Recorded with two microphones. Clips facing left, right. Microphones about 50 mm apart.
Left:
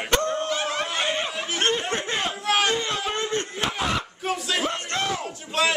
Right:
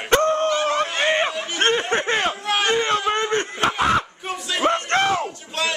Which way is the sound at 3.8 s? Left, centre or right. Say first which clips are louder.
Right 8 dB; right.